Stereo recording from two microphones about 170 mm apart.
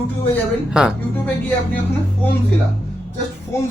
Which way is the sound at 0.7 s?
5° right (ahead or behind).